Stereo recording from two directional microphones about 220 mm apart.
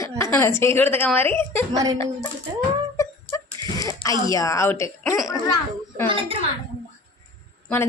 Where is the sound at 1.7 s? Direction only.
15° right (ahead or behind).